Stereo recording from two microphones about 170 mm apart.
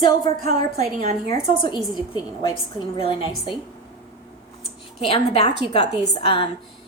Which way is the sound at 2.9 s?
30° left (ahead or behind).